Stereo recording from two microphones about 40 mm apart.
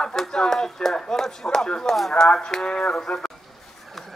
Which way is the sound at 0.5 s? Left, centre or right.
Centre.